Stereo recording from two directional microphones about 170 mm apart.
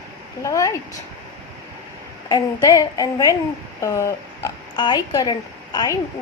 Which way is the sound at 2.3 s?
20° left (ahead or behind).